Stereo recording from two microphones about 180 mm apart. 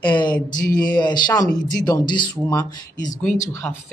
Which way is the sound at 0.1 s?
25° left (ahead or behind).